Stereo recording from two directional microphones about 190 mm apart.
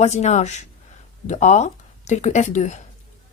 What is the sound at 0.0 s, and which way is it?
Speech, 35° left (ahead or behind).